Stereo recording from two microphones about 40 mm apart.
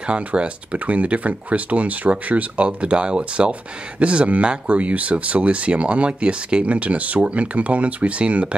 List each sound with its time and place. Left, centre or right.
0.0 s speech: right